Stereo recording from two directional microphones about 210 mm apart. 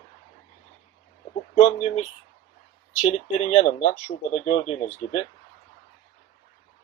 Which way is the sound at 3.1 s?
30° left (ahead or behind).